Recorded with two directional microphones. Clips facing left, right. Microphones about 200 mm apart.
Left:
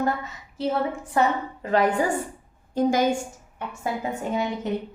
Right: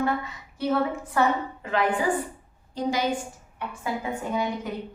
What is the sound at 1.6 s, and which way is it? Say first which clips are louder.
A woman's voice: left 3 dB; 40° left (ahead or behind).